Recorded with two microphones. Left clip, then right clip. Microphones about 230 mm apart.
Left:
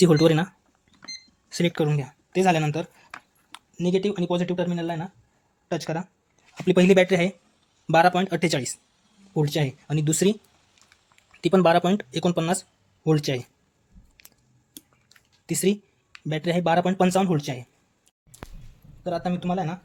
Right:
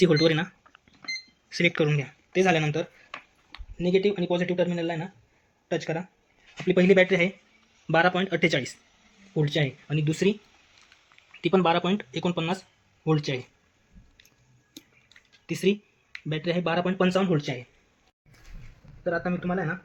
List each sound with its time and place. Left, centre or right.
0.1 s speech: left
1.5 s speech: left
2.3 s speech: left
15.4 s speech: left
19.1 s speech: left